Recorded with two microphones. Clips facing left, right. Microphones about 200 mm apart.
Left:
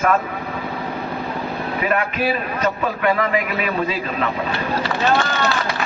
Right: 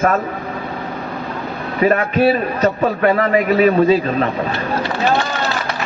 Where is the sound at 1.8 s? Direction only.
35° right (ahead or behind).